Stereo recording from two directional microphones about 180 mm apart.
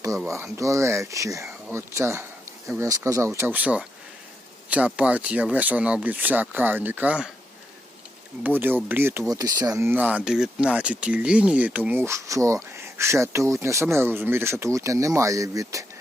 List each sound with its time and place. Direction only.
0.3 s speech: 15° right (ahead or behind)
8.4 s speech: 10° right (ahead or behind)